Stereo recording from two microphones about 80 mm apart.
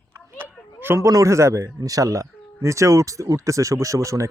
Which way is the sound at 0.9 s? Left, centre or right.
Right.